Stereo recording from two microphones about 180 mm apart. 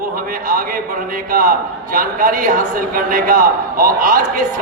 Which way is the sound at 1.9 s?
50° right (ahead or behind).